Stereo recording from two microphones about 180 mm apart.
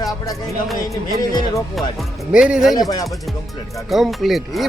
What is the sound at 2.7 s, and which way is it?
Music, 20° left (ahead or behind).